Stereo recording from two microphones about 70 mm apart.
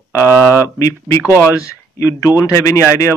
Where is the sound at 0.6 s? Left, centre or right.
Left.